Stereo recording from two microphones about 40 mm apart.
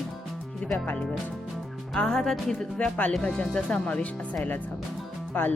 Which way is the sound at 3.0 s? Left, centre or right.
Left.